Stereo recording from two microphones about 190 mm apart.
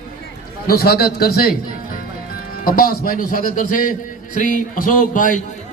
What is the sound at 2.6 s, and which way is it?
A man's voice, 50° left (ahead or behind).